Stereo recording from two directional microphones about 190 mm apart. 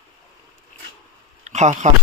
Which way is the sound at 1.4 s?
40° right (ahead or behind).